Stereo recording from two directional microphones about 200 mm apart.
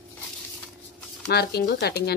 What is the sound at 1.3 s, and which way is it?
Speech, 55° left (ahead or behind).